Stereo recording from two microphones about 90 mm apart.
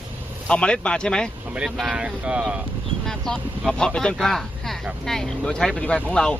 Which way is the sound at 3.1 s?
5° left (ahead or behind).